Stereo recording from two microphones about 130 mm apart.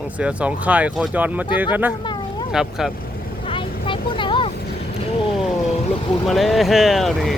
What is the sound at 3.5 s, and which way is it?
Vehicle, 40° left (ahead or behind).